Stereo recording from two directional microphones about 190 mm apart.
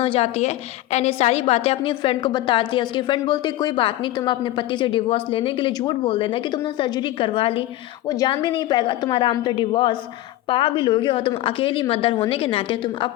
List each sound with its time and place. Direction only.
0.0 s a woman's voice: 30° left (ahead or behind)